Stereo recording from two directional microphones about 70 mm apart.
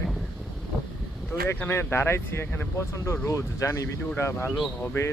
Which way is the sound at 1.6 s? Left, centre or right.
Left.